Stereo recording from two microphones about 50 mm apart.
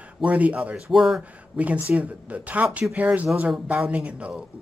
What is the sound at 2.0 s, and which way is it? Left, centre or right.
A man's voice, right.